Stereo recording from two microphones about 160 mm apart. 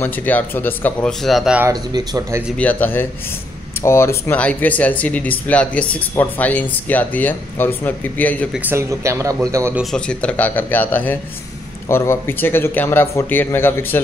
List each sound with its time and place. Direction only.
0.0 s speech: 10° left (ahead or behind); by 1.7 s 5° right (ahead or behind)
1.7 s speech: 25° right (ahead or behind)
2.5 s speech: 10° left (ahead or behind)
8.5 s speech: 15° right (ahead or behind)
9.8 s speech: 5° left (ahead or behind)